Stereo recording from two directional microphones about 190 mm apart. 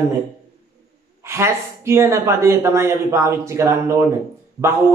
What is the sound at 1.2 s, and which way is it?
A man's voice, 15° right (ahead or behind).